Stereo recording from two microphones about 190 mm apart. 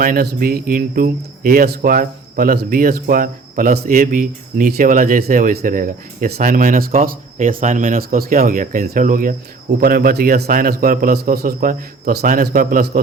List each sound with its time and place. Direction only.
0.0 s speech: 50° right (ahead or behind)